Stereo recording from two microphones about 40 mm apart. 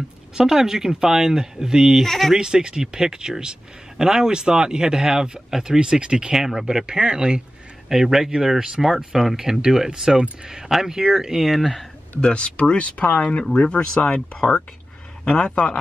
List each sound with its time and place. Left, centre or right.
0.5 s speech: centre
2.0 s speech: centre
2.3 s speech: centre
6.3 s speech: centre
12.2 s speech: left